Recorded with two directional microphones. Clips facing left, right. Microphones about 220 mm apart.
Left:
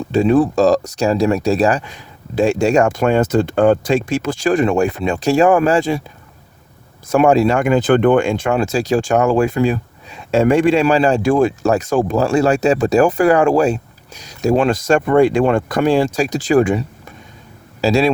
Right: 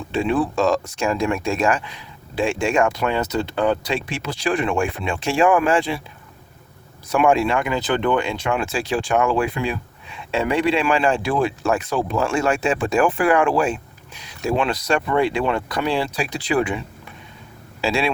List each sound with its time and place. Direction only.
0.1 s speech: 40° left (ahead or behind)
7.1 s speech: 40° left (ahead or behind)